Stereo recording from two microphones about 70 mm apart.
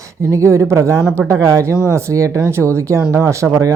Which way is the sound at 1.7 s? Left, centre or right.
Left.